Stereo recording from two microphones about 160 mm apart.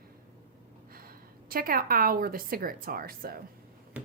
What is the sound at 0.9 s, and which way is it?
A woman's voice, 65° right (ahead or behind).